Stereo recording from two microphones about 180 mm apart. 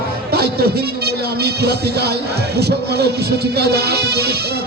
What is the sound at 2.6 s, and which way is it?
Music, 65° right (ahead or behind).